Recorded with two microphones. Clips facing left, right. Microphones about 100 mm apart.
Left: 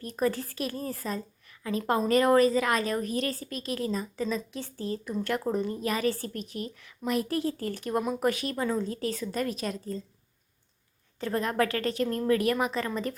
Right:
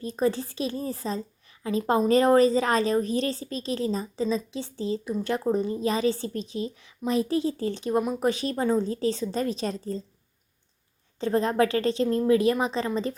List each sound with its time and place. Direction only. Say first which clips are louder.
0.0 s a woman's voice: right 3 dB; 20° right (ahead or behind)
11.2 s a woman's voice: right 5 dB; 25° right (ahead or behind)